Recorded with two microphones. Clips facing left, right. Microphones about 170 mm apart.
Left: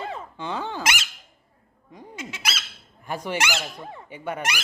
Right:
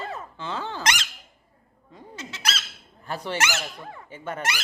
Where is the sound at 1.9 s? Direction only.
10° left (ahead or behind).